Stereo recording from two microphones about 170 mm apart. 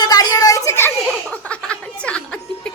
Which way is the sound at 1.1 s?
5° left (ahead or behind).